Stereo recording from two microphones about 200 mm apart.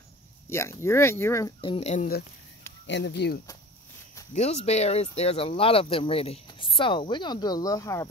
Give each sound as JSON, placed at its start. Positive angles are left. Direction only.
{"t": 0.5, "sound": "speech", "side_deg": 15}
{"t": 1.6, "sound": "speech", "side_deg": 30}
{"t": 2.9, "sound": "speech", "side_deg": 60}
{"t": 4.3, "sound": "speech", "side_deg": 35}